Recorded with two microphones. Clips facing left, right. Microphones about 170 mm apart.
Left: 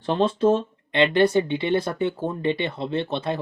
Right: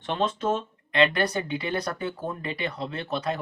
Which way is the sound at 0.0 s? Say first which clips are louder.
Left 7 dB; 35° left (ahead or behind).